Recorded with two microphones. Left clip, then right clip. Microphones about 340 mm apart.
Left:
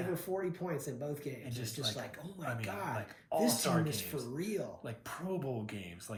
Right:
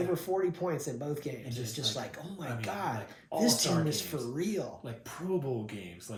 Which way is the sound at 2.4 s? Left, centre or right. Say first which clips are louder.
Right 3 dB; centre.